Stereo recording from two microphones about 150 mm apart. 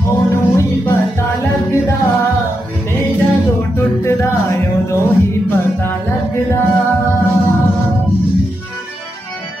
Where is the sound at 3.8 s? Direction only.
20° left (ahead or behind).